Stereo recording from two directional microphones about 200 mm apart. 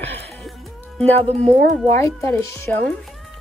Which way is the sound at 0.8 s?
5° left (ahead or behind).